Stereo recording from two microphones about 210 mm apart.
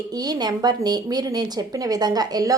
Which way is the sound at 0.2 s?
20° right (ahead or behind).